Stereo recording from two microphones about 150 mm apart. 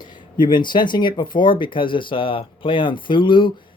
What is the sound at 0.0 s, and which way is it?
Speech, 30° left (ahead or behind).